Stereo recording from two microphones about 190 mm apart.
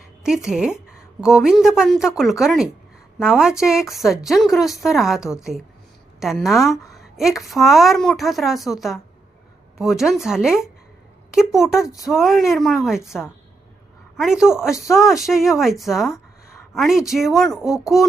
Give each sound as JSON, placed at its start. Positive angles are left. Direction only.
{"t": 0.2, "sound": "a woman's voice", "side_deg": -5}